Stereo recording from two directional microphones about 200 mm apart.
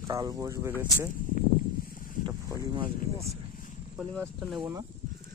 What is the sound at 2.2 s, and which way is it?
Boat, 20° right (ahead or behind).